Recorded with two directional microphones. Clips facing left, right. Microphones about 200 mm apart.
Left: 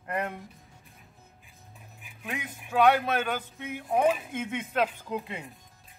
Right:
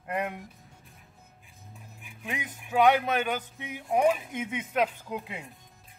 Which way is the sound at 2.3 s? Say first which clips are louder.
Even; 15° right (ahead or behind).